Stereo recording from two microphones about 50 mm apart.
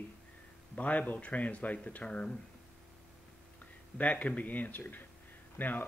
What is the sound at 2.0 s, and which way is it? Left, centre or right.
Speech, centre.